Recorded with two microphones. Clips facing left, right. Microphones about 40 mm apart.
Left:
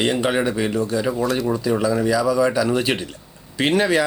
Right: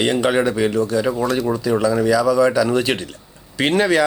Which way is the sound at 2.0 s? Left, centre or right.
Centre.